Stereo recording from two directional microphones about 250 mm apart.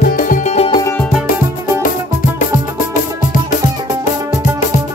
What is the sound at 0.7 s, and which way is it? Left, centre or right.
Music, centre.